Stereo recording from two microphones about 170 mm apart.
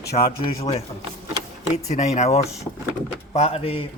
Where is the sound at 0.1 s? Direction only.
40° left (ahead or behind).